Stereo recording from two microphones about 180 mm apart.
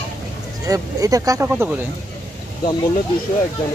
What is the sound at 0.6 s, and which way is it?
Speech, 20° right (ahead or behind).